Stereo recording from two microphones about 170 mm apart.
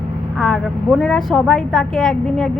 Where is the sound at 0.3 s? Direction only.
5° left (ahead or behind).